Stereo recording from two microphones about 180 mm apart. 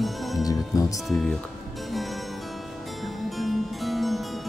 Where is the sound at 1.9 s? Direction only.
Centre (ahead or behind).